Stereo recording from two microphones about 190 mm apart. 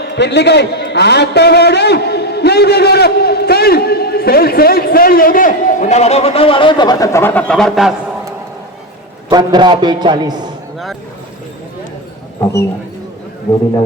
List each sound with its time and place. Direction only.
0.0 s a man's voice: 65° left (ahead or behind); by 7.9 s centre (ahead or behind)
9.3 s a man's voice: 20° right (ahead or behind)